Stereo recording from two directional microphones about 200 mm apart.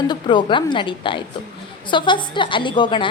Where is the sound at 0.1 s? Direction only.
20° left (ahead or behind).